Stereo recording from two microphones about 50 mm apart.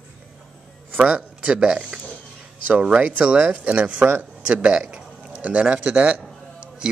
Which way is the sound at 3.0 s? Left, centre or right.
Right.